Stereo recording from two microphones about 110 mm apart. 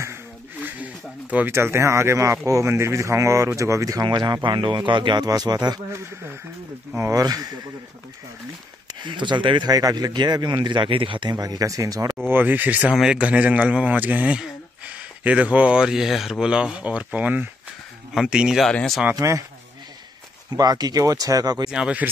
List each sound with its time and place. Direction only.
1.3 s speech: 20° right (ahead or behind); by 5.8 s 40° right (ahead or behind)
7.0 s speech: 30° right (ahead or behind)
8.8 s speech: 45° right (ahead or behind)
12.3 s a man's voice: 15° right (ahead or behind)
18.7 s speech: 10° left (ahead or behind)
19.1 s speech: 30° right (ahead or behind)
20.5 s speech: 35° right (ahead or behind)
21.6 s speech: 10° right (ahead or behind)